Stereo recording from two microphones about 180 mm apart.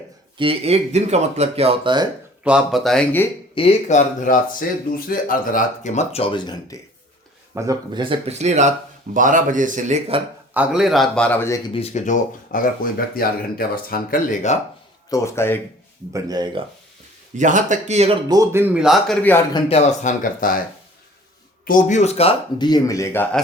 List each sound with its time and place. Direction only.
0.3 s speech: 30° right (ahead or behind)
2.4 s a man's voice: 5° right (ahead or behind)
3.5 s speech: 30° left (ahead or behind)
6.1 s speech: 25° left (ahead or behind)
7.5 s speech: 20° right (ahead or behind)
8.3 s speech: 40° right (ahead or behind)
10.5 s a man's voice: 5° right (ahead or behind); by 11.6 s 15° left (ahead or behind)
11.7 s speech: 35° left (ahead or behind)
15.1 s speech: 15° left (ahead or behind)
16.1 s speech: 20° right (ahead or behind)
17.3 s speech: 45° right (ahead or behind)
18.3 s a man's voice: 15° right (ahead or behind)
19.5 s speech: 30° left (ahead or behind); by 20.6 s 50° left (ahead or behind)
21.6 s speech: 50° left (ahead or behind); by 23.2 s 15° left (ahead or behind)